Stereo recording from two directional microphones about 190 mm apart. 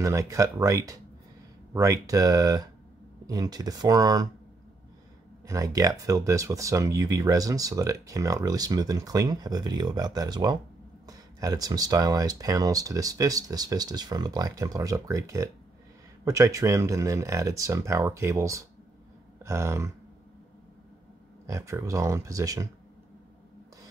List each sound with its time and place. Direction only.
0.0 s speech: 15° right (ahead or behind)
5.5 s speech: 15° right (ahead or behind)
21.5 s speech: 15° right (ahead or behind)